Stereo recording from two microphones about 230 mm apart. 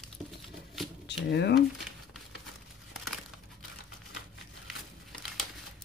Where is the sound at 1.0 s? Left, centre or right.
Left.